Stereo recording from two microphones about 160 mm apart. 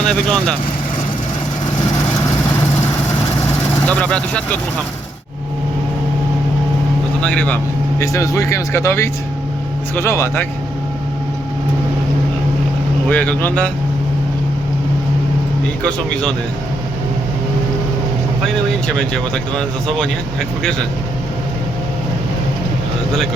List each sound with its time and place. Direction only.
0.1 s speech: 5° left (ahead or behind)
3.8 s speech: 10° left (ahead or behind)
7.2 s speech: 10° left (ahead or behind)
13.1 s speech: 10° left (ahead or behind)
15.8 s speech: 5° left (ahead or behind)
18.9 s speech: 5° left (ahead or behind)